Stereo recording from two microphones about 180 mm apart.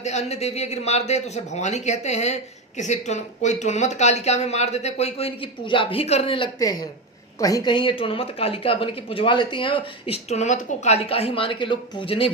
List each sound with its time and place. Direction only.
0.0 s a man's voice: 40° left (ahead or behind)